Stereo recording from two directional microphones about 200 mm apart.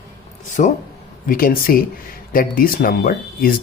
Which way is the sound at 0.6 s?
40° left (ahead or behind).